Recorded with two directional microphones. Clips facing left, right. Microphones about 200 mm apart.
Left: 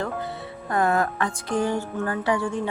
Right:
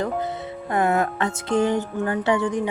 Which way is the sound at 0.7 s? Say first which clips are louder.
Right 1 dB; 20° right (ahead or behind).